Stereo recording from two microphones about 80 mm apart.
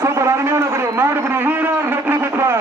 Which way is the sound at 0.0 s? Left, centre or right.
Right.